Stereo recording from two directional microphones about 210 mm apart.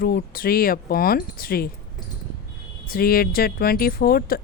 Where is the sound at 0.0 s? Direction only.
45° left (ahead or behind).